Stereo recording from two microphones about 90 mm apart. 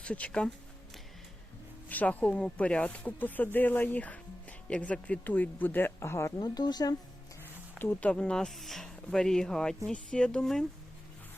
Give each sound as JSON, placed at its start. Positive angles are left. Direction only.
{"t": 0.0, "sound": "speech", "side_deg": 15}
{"t": 1.9, "sound": "speech", "side_deg": 20}
{"t": 6.4, "sound": "speech", "side_deg": 50}
{"t": 7.8, "sound": "speech", "side_deg": 20}
{"t": 8.1, "sound": "speech", "side_deg": 10}